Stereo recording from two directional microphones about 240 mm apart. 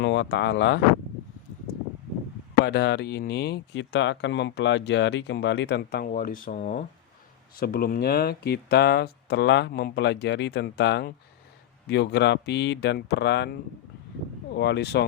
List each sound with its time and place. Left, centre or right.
0.0 s speech: left
2.6 s speech: left
14.5 s speech: left